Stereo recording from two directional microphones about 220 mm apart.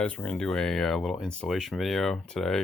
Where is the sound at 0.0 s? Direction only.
5° left (ahead or behind).